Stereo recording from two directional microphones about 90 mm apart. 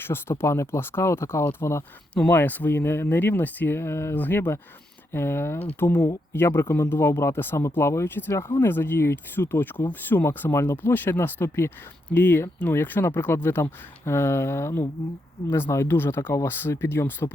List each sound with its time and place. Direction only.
0.0 s speech: 25° left (ahead or behind)